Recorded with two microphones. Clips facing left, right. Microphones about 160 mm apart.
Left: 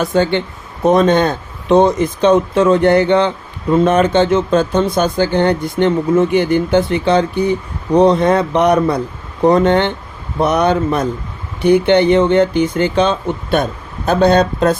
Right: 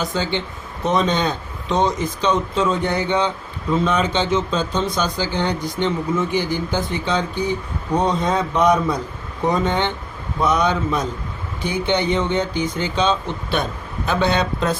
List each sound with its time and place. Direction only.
0.0 s a man's voice: 60° left (ahead or behind)